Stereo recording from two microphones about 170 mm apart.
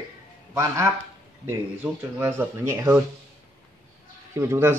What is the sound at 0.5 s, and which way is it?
Speech, 15° right (ahead or behind).